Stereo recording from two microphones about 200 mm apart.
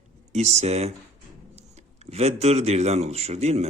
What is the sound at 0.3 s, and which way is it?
Speech, 35° right (ahead or behind).